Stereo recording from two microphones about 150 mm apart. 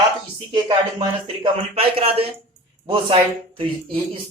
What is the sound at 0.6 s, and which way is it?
Speech, 30° right (ahead or behind).